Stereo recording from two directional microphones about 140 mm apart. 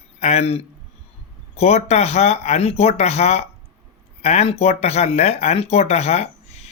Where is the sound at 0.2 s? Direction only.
50° left (ahead or behind).